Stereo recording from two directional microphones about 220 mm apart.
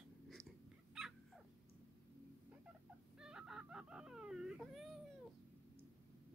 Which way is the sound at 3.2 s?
5° right (ahead or behind).